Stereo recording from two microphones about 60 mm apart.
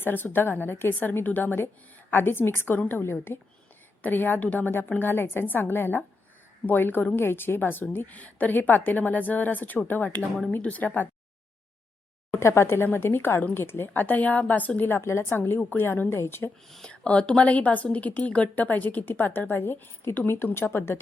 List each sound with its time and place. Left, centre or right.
0.0 s a woman's voice: left
12.3 s a woman's voice: left
15.0 s a woman's voice: left
16.6 s speech: centre
16.9 s a woman's voice: centre; by 21.0 s left